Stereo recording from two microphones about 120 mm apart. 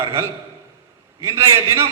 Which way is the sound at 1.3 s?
20° right (ahead or behind).